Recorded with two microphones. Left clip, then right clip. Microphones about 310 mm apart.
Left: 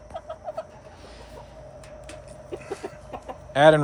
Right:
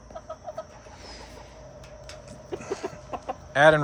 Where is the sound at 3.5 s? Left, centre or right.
Centre.